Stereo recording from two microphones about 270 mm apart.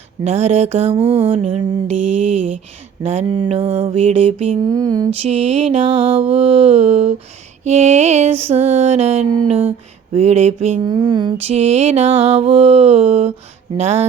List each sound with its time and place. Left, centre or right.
0.3 s mantra: right
1.9 s mantra: right
3.0 s mantra: right